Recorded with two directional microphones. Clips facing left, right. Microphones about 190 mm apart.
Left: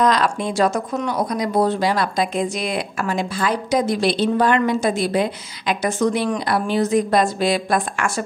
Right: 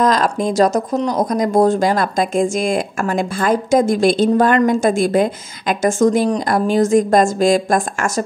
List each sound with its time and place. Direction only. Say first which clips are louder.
0.0 s speech: right 3 dB; 45° right (ahead or behind)